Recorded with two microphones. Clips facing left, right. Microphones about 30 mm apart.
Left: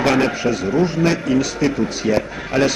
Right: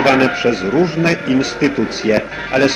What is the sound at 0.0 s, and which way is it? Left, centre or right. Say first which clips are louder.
Speech: right 4 dB; right.